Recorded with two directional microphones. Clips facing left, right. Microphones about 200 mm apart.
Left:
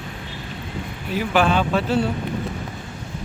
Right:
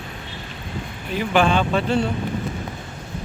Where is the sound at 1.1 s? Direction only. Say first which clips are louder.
Even; 5° left (ahead or behind).